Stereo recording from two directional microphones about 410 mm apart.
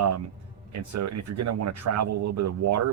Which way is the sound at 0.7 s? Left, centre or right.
Right.